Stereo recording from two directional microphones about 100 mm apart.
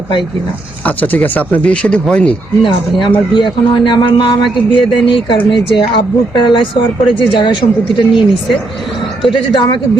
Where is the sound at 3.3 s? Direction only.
55° left (ahead or behind).